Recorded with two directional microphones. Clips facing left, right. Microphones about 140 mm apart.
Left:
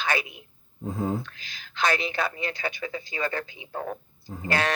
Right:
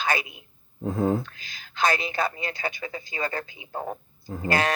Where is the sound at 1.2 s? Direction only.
40° right (ahead or behind).